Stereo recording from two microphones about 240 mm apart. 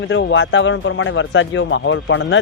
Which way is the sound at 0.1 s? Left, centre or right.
Left.